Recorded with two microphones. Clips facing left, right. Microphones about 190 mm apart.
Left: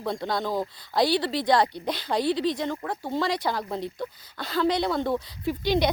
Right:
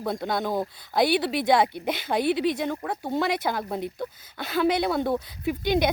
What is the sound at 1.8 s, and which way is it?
Speech, 5° right (ahead or behind).